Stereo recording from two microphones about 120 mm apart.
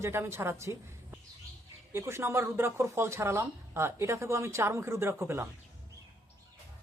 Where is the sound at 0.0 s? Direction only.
20° right (ahead or behind).